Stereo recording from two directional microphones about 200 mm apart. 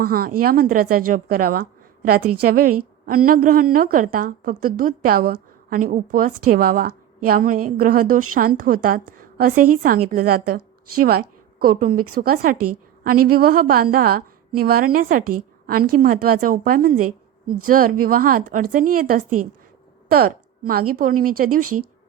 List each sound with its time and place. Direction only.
0.0 s a woman's voice: 50° right (ahead or behind)
11.6 s a woman's voice: 45° right (ahead or behind)
20.1 s a sound: 50° right (ahead or behind)
20.9 s a woman's voice: 45° right (ahead or behind)
21.6 s speech: 90° right